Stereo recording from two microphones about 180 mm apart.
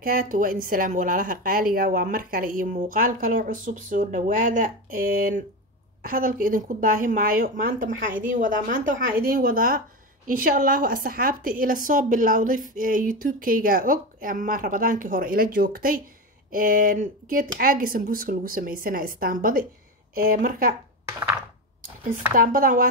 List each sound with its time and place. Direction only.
0.0 s speech: 50° right (ahead or behind)
22.3 s speech: 50° right (ahead or behind)